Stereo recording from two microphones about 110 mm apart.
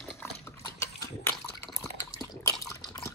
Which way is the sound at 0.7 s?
25° left (ahead or behind).